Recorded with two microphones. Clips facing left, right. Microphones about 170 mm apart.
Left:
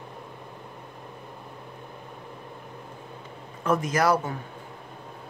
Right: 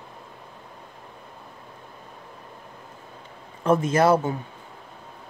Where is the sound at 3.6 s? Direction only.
30° right (ahead or behind).